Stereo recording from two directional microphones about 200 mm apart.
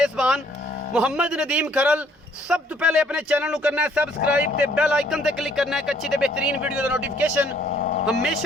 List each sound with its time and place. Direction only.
0.0 s cattle: 5° right (ahead or behind)
0.9 s speech: 5° right (ahead or behind)
7.6 s a sound: 45° left (ahead or behind)
8.2 s speech: centre (ahead or behind)